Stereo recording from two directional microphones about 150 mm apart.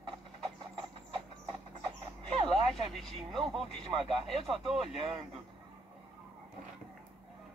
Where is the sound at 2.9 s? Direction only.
Centre (ahead or behind).